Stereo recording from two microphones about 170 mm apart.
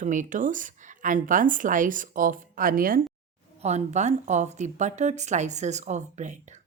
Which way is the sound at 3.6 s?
40° right (ahead or behind).